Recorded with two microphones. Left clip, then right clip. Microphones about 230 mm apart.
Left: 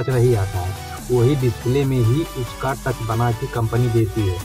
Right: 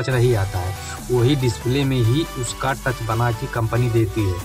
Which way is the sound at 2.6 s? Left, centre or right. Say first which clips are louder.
Right 1 dB; centre.